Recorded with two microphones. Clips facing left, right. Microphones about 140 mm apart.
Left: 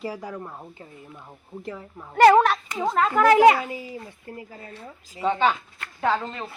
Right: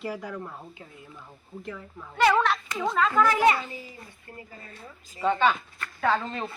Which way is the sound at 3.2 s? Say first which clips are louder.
Left 9 dB; 90° left.